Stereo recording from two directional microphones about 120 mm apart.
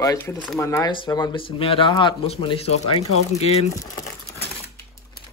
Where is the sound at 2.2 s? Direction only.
55° left (ahead or behind).